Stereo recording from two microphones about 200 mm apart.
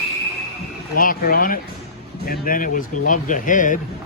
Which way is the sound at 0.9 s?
45° left (ahead or behind).